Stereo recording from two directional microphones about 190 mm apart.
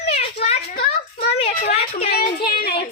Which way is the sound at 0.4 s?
35° left (ahead or behind).